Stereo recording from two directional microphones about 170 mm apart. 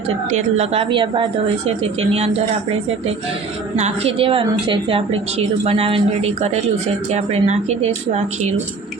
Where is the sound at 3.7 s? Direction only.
40° right (ahead or behind).